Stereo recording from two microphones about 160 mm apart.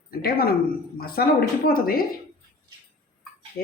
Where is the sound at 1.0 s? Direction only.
70° left (ahead or behind).